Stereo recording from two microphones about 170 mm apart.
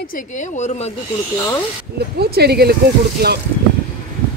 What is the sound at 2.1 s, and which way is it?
Speech, 70° right (ahead or behind).